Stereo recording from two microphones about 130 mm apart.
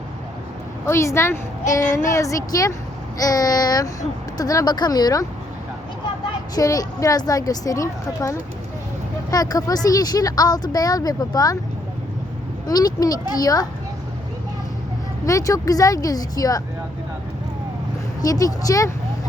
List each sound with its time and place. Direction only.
0.9 s a woman's voice: 20° left (ahead or behind)
6.6 s a woman's voice: 25° left (ahead or behind)
12.6 s a woman's voice: 30° left (ahead or behind)
15.3 s a woman's voice: 25° left (ahead or behind)
18.2 s a woman's voice: 25° left (ahead or behind)